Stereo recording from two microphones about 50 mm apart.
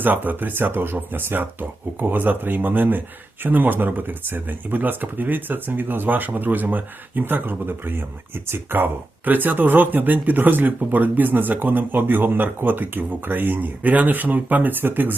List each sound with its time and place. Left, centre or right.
0.0 s speech: right